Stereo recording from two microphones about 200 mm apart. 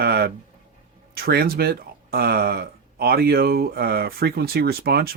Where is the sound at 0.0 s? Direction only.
50° right (ahead or behind).